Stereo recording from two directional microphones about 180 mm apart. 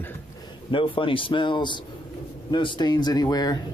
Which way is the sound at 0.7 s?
30° left (ahead or behind).